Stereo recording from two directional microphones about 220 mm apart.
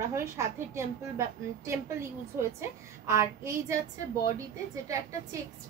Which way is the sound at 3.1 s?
10° right (ahead or behind).